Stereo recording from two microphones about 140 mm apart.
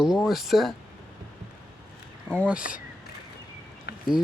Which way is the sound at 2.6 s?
90° left.